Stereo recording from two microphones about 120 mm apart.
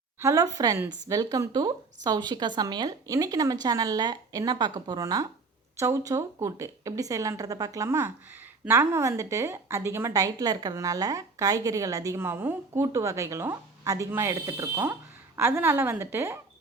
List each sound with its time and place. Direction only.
0.2 s a woman's voice: 25° right (ahead or behind)